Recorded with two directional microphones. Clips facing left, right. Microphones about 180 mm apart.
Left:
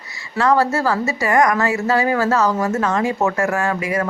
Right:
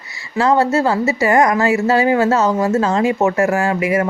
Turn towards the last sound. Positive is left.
turn(degrees=-25)  # may be behind; listen again after turning